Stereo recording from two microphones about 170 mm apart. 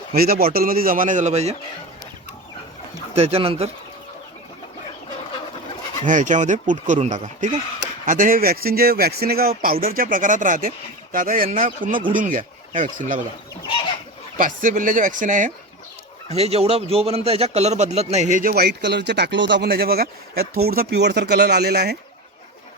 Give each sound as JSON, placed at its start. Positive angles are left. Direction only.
{"t": 0.1, "sound": "speech", "side_deg": -60}
{"t": 3.2, "sound": "speech", "side_deg": -35}
{"t": 6.1, "sound": "speech", "side_deg": -50}
{"t": 14.3, "sound": "speech", "side_deg": -50}
{"t": 16.3, "sound": "speech", "side_deg": -35}